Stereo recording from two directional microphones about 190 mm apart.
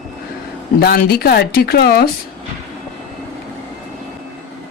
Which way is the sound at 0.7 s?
55° left (ahead or behind).